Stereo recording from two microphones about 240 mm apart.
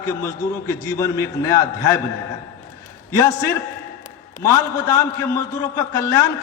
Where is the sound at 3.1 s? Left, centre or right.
Centre.